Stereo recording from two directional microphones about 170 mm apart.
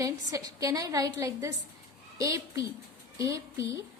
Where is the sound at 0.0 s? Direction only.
20° right (ahead or behind).